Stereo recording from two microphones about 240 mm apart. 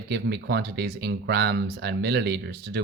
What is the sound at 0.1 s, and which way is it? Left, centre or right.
Speech, right.